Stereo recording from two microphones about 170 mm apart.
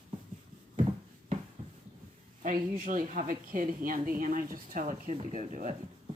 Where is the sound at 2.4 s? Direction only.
50° right (ahead or behind).